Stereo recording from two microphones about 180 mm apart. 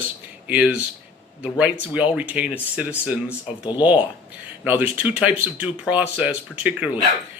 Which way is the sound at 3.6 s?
25° left (ahead or behind).